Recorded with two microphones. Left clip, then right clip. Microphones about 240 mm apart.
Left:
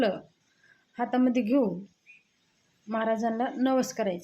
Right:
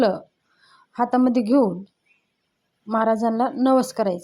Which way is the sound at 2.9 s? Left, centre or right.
Right.